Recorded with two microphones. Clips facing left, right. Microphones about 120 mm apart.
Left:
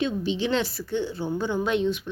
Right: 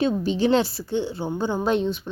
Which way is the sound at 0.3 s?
40° right (ahead or behind).